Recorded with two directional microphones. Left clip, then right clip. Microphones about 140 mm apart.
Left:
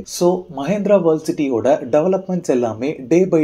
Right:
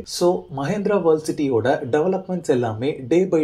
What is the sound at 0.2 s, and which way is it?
Speech, 30° left (ahead or behind).